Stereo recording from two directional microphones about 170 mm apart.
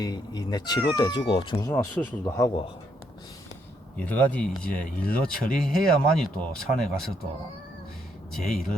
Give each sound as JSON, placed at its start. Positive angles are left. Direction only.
{"t": 0.0, "sound": "speech", "side_deg": 25}
{"t": 1.5, "sound": "speech", "side_deg": 15}
{"t": 3.9, "sound": "speech", "side_deg": 10}
{"t": 8.3, "sound": "speech", "side_deg": 0}